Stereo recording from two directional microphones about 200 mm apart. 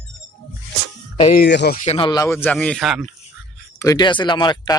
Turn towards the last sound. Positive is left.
turn(degrees=20)  # may be behind; listen again after turning